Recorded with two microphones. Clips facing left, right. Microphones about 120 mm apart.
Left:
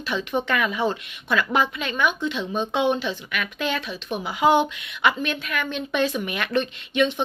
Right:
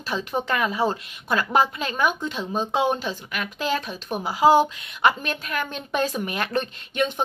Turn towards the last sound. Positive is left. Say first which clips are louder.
# left 3 dB
turn(degrees=-45)  # may be behind; listen again after turning